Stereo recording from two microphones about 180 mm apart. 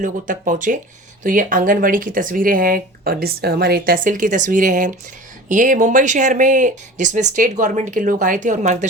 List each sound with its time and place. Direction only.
0.0 s speech: 45° right (ahead or behind)